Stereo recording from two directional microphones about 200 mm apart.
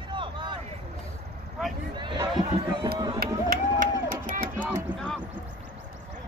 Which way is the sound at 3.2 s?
45° right (ahead or behind).